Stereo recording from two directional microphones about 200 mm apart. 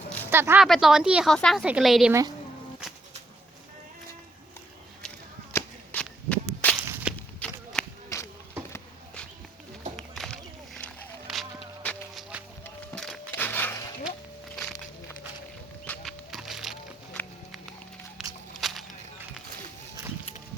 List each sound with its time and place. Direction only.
0.3 s a woman's voice: 10° right (ahead or behind)
5.5 s whip: 5° left (ahead or behind)
6.8 s whip: 10° right (ahead or behind)
7.4 s a sound: 5° left (ahead or behind)
10.2 s music: 5° left (ahead or behind)
15.9 s music: centre (ahead or behind)
18.2 s walk: 5° right (ahead or behind)
18.5 s a sound: centre (ahead or behind)